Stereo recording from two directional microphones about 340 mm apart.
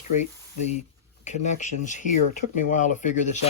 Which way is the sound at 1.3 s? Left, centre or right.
Left.